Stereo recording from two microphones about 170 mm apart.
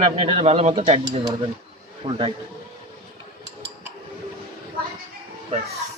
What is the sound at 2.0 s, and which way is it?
Speech, 30° right (ahead or behind).